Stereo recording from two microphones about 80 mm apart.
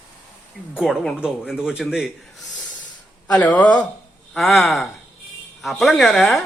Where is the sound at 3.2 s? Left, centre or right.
Centre.